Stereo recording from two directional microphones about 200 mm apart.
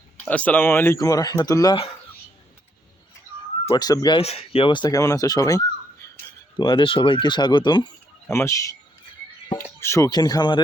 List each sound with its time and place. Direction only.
0.3 s speech: 10° left (ahead or behind)
3.7 s speech: 15° left (ahead or behind)
9.8 s speech: 15° left (ahead or behind)